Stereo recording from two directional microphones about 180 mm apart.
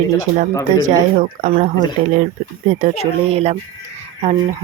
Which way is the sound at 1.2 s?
40° right (ahead or behind).